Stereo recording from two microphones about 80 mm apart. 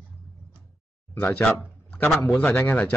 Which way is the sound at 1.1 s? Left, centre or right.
Left.